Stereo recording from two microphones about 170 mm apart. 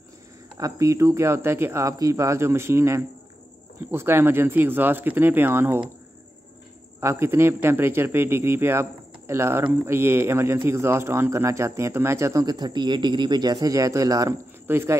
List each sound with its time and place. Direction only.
0.6 s a man's voice: 20° right (ahead or behind)
7.0 s a man's voice: 15° right (ahead or behind)